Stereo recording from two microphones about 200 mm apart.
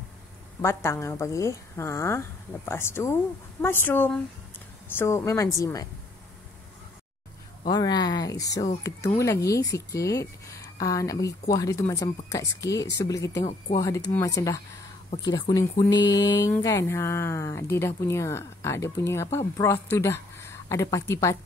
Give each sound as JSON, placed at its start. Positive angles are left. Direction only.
{"t": 0.6, "sound": "speech", "side_deg": 15}
{"t": 7.6, "sound": "speech", "side_deg": 20}
{"t": 13.4, "sound": "speech", "side_deg": 35}
{"t": 13.7, "sound": "speech", "side_deg": 15}